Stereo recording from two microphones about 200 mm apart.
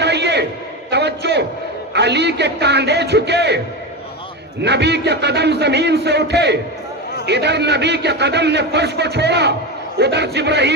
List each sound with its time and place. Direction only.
0.0 s a sound: 60° right (ahead or behind)
2.0 s music: 60° right (ahead or behind)
4.6 s a man's voice: 60° right (ahead or behind)